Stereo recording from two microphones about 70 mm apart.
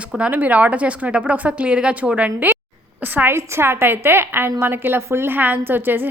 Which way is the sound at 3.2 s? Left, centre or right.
Right.